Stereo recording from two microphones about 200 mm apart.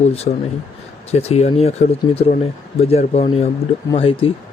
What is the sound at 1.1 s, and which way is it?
Speech, 30° left (ahead or behind).